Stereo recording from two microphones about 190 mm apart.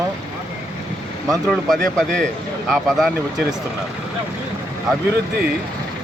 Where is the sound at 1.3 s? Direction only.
Centre (ahead or behind).